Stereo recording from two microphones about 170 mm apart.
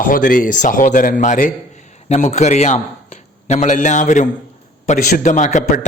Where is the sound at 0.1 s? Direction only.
50° left (ahead or behind).